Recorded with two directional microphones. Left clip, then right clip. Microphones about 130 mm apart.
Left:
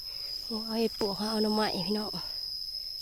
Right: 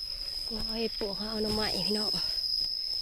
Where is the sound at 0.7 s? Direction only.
35° left (ahead or behind); by 2.3 s 20° left (ahead or behind).